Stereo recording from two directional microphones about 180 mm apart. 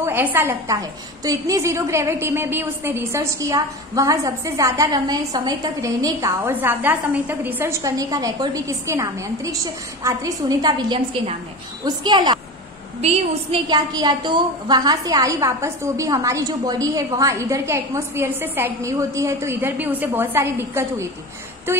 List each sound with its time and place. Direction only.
0.0 s a woman's voice: 10° right (ahead or behind)
13.0 s a woman's voice: 35° right (ahead or behind); by 21.1 s 15° right (ahead or behind)